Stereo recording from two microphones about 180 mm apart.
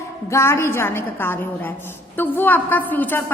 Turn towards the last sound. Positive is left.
turn(degrees=10)  # may be behind; listen again after turning